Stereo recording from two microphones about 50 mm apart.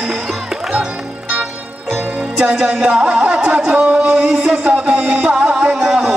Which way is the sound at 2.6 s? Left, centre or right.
Right.